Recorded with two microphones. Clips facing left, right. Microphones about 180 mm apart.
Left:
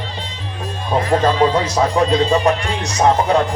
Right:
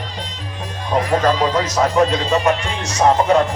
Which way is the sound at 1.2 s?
30° left (ahead or behind).